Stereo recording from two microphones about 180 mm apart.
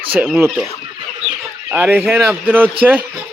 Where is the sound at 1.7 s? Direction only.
10° right (ahead or behind).